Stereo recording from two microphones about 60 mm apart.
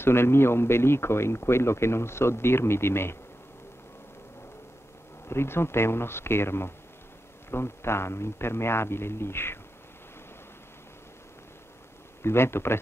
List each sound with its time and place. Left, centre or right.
0.0 s speech: left
5.3 s speech: left
12.2 s speech: left